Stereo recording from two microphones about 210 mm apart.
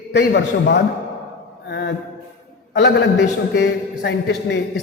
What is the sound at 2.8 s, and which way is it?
A man's voice, 55° left (ahead or behind).